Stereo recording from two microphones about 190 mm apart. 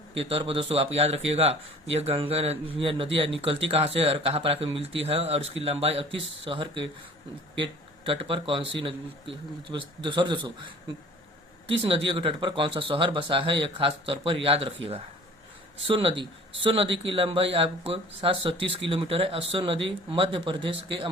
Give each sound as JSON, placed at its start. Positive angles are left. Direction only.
{"t": 0.2, "sound": "speech", "side_deg": -30}
{"t": 11.7, "sound": "speech", "side_deg": -30}
{"t": 15.9, "sound": "speech", "side_deg": -25}